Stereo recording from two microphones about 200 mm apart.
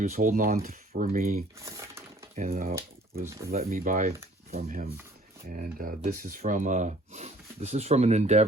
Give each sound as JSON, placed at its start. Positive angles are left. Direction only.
{"t": 0.0, "sound": "speech", "side_deg": -40}
{"t": 1.5, "sound": "a sound", "side_deg": -15}
{"t": 2.3, "sound": "speech", "side_deg": -35}